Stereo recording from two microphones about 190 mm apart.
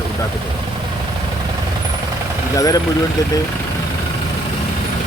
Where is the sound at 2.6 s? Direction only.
20° left (ahead or behind).